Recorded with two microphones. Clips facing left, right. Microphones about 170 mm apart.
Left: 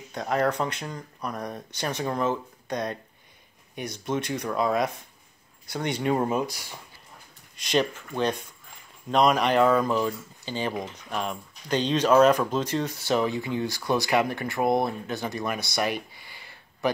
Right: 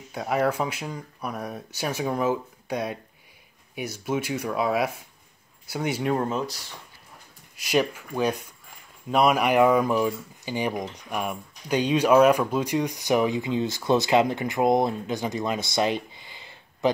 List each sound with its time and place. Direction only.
0.1 s speech: 5° right (ahead or behind)
6.1 s speech: 10° left (ahead or behind)
7.5 s speech: 10° right (ahead or behind)